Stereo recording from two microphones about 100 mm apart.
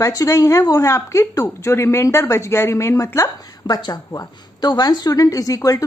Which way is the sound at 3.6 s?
45° left (ahead or behind).